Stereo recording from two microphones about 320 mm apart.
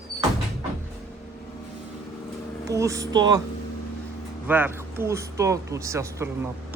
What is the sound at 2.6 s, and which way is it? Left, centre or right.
Speech, centre.